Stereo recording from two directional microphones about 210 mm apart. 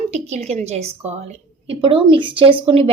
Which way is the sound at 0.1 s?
30° right (ahead or behind).